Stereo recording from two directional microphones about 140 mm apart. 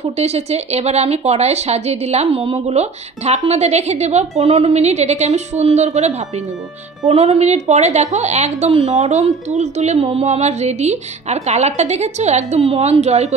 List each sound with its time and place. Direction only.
0.0 s speech: 50° right (ahead or behind)